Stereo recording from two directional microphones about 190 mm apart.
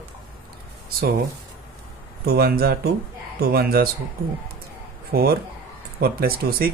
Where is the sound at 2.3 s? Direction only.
55° right (ahead or behind).